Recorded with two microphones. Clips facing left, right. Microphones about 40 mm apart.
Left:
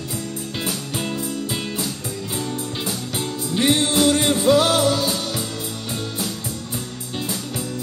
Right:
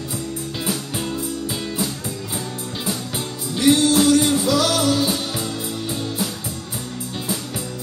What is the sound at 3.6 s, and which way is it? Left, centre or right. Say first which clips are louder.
Music: right 3 dB; left.